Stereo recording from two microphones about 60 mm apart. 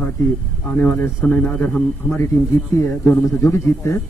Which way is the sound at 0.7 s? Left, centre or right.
Left.